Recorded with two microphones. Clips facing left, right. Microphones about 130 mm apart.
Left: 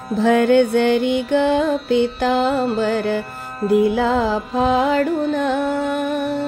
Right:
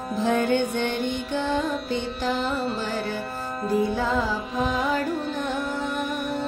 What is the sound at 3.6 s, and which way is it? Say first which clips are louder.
Music: left 8 dB; 5° left (ahead or behind).